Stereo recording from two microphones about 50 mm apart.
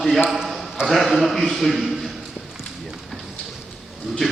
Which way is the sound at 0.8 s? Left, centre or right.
Centre.